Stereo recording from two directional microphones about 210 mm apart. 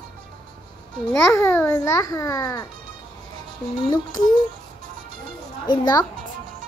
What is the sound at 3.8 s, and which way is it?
Child singing, 20° left (ahead or behind).